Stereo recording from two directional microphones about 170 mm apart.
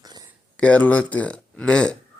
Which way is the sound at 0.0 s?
25° right (ahead or behind).